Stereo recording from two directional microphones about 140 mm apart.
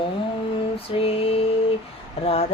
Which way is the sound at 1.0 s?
40° left (ahead or behind).